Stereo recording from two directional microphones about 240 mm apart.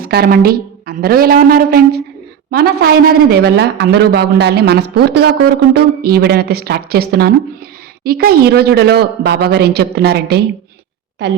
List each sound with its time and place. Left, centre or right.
0.0 s a woman's voice: right